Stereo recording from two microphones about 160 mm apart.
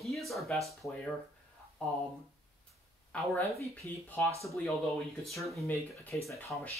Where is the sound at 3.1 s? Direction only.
10° left (ahead or behind).